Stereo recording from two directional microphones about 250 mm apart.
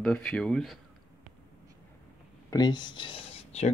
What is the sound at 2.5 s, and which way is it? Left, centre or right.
Speech, centre.